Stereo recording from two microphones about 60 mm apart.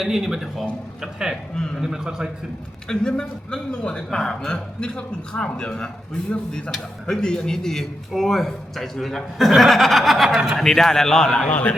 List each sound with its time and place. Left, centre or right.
0.0 s a man's voice: centre
1.5 s speech: centre
1.8 s a man's voice: centre
2.8 s speech: centre
10.6 s speech: centre
11.4 s a man's voice: left